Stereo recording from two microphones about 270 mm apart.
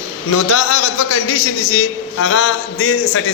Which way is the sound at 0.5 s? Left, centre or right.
Left.